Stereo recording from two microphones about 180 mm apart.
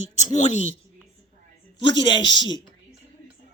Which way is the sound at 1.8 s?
25° left (ahead or behind).